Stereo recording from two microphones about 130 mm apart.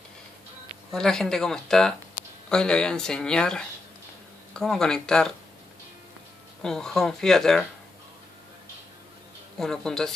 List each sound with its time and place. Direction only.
0.9 s speech: 5° left (ahead or behind)
6.6 s speech: 5° left (ahead or behind)
9.6 s speech: 5° left (ahead or behind)